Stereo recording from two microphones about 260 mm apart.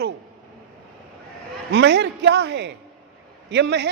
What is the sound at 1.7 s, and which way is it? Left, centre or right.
A man's voice, right.